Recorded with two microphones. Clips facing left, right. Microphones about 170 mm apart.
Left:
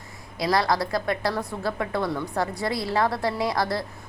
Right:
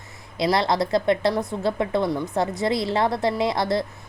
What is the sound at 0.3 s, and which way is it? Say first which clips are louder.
A woman's voice: right 2 dB; 25° right (ahead or behind).